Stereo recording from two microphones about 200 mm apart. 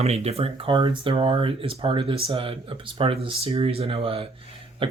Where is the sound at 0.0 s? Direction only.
30° right (ahead or behind).